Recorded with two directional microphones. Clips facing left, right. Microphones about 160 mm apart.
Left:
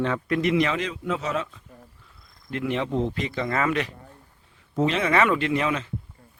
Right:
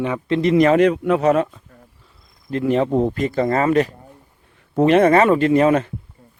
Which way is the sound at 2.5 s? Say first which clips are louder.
Right 8 dB; 40° right (ahead or behind).